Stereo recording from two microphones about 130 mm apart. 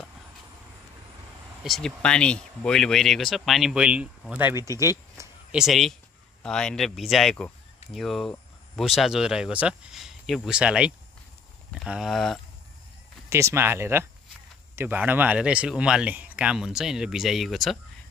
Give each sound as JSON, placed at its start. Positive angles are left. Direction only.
{"t": 1.6, "sound": "speech", "side_deg": 5}
{"t": 5.5, "sound": "speech", "side_deg": -5}
{"t": 11.9, "sound": "speech", "side_deg": 0}
{"t": 13.3, "sound": "speech", "side_deg": -20}